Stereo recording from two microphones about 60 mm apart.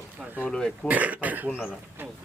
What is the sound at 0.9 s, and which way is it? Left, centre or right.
Speech, right.